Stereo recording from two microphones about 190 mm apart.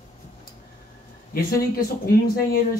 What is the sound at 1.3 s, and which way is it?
Speech, 50° left (ahead or behind).